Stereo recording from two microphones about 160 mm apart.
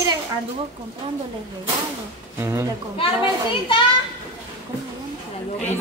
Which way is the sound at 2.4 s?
15° right (ahead or behind).